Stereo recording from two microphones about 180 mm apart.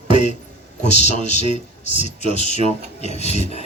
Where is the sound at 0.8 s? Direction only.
40° left (ahead or behind).